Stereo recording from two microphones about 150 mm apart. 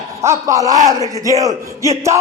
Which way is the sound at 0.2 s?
20° right (ahead or behind).